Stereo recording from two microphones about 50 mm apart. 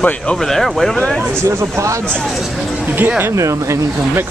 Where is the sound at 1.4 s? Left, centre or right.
Right.